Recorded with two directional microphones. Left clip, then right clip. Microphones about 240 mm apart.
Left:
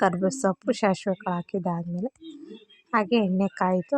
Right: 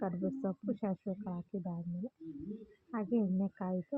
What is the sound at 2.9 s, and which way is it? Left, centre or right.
Speech, left.